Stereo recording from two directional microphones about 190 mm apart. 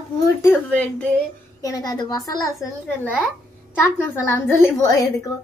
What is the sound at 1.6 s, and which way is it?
Speech, 20° left (ahead or behind).